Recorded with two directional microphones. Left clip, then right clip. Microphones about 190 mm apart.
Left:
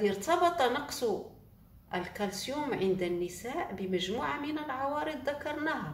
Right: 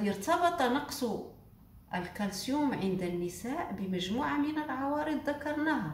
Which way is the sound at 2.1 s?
35° left (ahead or behind).